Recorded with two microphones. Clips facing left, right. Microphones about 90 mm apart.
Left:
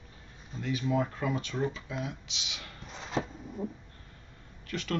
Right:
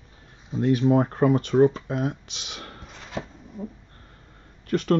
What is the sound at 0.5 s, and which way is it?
Speech, 55° right (ahead or behind).